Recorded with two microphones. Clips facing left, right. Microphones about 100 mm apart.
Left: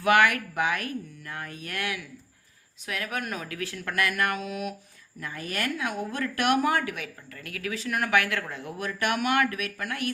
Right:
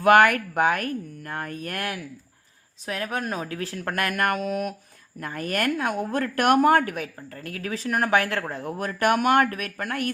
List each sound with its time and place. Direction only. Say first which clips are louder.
0.0 s a woman's voice: right 5 dB; 45° right (ahead or behind)